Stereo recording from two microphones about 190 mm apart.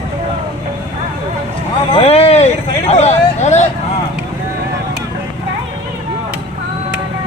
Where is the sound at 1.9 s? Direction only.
30° left (ahead or behind).